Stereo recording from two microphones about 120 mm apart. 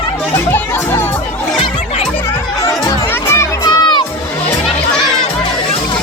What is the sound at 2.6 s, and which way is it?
Music, 25° left (ahead or behind).